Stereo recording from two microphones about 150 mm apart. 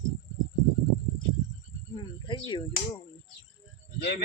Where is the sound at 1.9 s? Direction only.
30° left (ahead or behind).